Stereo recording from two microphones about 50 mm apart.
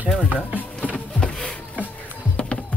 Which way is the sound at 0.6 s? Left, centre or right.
Left.